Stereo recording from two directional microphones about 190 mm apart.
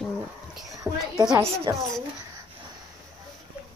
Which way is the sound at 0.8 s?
Centre (ahead or behind).